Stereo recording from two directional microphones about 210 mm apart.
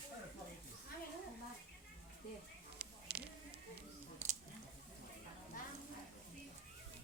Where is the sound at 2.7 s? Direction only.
50° right (ahead or behind).